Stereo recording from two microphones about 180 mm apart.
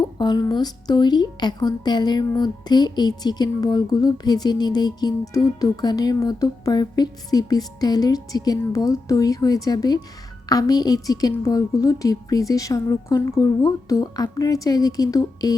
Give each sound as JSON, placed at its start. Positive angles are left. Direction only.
{"t": 0.2, "sound": "a woman's voice", "side_deg": 25}